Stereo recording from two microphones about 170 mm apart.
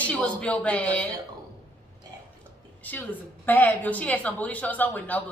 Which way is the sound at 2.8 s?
10° left (ahead or behind).